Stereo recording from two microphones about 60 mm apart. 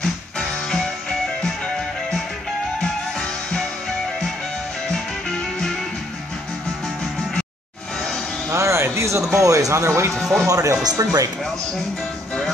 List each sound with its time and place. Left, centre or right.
0.0 s music: centre
2.8 s music: centre
8.5 s music: right
9.4 s speech: right
10.3 s speech: right